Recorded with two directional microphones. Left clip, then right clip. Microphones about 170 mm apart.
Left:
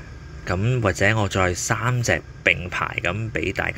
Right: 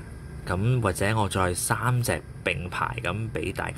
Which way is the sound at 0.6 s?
Centre (ahead or behind).